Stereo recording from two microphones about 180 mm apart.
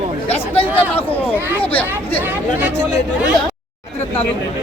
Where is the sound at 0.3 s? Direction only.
30° left (ahead or behind).